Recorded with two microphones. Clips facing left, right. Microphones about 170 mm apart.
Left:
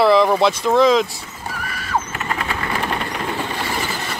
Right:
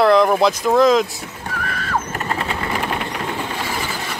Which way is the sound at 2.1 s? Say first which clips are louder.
Right 1 dB; 35° right (ahead or behind).